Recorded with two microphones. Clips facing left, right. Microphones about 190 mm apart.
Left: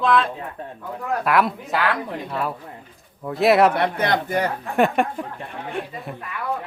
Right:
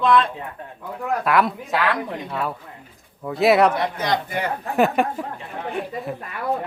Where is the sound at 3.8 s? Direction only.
60° left (ahead or behind).